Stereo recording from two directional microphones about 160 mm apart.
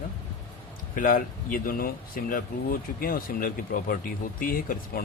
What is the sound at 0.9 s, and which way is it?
Speech, 60° left (ahead or behind).